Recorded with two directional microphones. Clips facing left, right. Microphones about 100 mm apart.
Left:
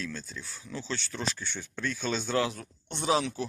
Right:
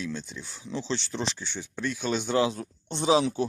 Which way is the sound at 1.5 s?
10° right (ahead or behind).